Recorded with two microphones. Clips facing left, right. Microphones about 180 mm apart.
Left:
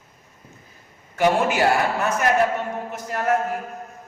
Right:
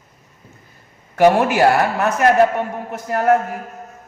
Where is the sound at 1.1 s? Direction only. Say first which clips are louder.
Right 6 dB; 60° right (ahead or behind).